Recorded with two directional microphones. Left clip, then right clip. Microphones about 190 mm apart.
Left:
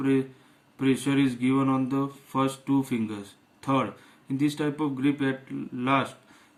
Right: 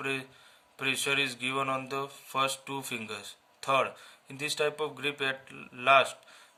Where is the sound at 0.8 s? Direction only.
50° right (ahead or behind).